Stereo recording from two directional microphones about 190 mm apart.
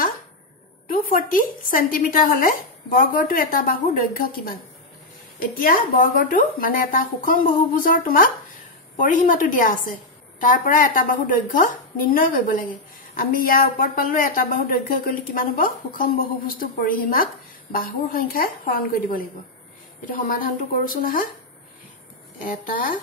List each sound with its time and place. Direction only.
0.8 s a woman's voice: 50° left (ahead or behind)